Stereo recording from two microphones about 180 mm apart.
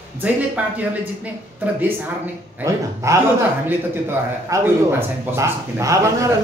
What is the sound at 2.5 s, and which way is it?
Speech, 15° right (ahead or behind).